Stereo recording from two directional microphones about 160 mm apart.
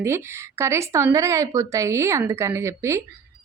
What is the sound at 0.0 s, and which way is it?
A woman's voice, 15° right (ahead or behind).